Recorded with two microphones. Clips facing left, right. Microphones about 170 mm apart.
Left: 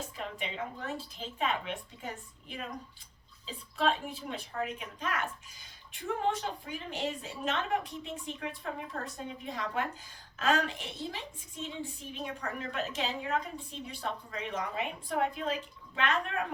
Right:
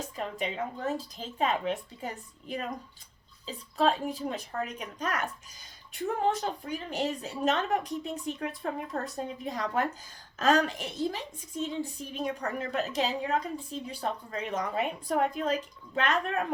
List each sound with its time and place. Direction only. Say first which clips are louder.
0.2 s a woman's voice: right 6 dB; 40° right (ahead or behind)